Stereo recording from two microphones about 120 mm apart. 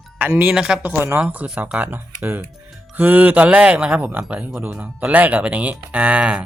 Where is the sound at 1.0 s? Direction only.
20° right (ahead or behind).